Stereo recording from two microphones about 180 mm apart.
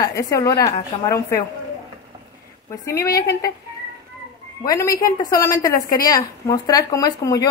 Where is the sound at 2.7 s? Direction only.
15° left (ahead or behind).